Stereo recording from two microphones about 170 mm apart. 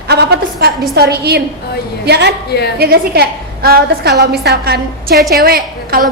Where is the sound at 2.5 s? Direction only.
70° left (ahead or behind).